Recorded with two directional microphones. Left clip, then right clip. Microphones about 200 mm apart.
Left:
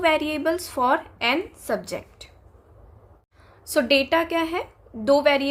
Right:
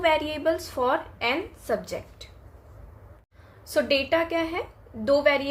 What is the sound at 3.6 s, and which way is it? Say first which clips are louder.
A woman's voice: left 4 dB; 35° left (ahead or behind).